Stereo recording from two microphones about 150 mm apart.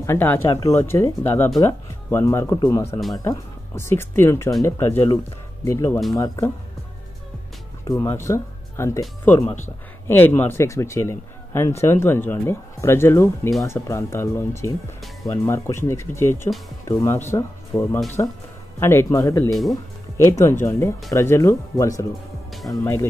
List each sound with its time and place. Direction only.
0.0 s speech: 15° left (ahead or behind)
7.9 s speech: 20° left (ahead or behind)